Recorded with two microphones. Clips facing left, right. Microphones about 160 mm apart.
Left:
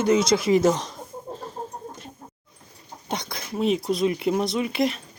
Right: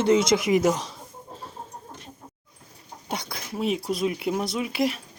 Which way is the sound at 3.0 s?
10° right (ahead or behind).